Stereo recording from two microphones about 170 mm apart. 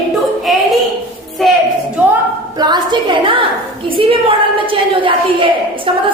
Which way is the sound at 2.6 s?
25° right (ahead or behind).